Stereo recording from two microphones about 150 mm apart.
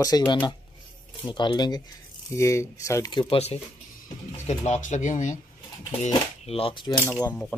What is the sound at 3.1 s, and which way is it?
Speech, 30° left (ahead or behind).